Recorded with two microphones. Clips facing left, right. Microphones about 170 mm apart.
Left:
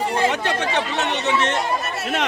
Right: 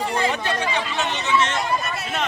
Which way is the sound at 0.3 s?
75° left (ahead or behind).